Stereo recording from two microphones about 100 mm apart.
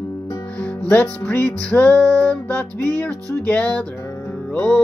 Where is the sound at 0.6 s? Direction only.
15° left (ahead or behind).